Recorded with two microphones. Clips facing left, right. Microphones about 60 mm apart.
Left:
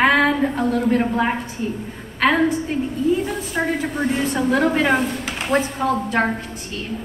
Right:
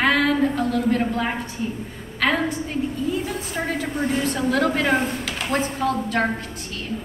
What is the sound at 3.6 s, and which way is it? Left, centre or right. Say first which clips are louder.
A woman's voice: left 3 dB; left.